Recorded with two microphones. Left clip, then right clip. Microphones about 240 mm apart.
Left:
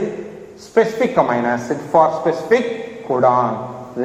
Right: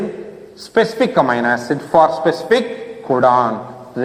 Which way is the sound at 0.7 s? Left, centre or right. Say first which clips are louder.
Right 1 dB; right.